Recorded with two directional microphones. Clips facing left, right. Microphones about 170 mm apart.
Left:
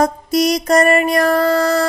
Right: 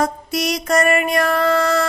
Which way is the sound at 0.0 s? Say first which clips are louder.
Left 6 dB; 35° left (ahead or behind).